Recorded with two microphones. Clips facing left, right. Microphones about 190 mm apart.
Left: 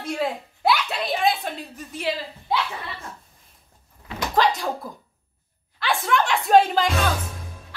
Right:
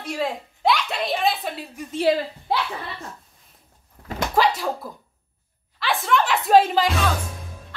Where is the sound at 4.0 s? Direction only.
65° right (ahead or behind).